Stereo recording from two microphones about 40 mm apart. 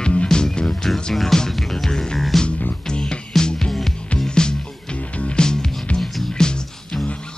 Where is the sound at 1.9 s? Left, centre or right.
Centre.